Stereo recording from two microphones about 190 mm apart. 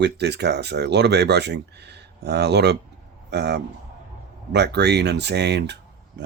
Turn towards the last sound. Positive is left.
turn(degrees=-65)  # may be behind; listen again after turning